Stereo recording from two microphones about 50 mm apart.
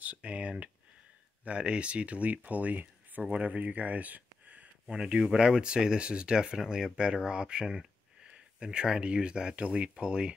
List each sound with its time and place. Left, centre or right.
0.0 s speech: right
4.8 s speech: centre